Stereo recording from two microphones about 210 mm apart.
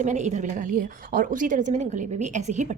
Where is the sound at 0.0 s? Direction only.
35° right (ahead or behind).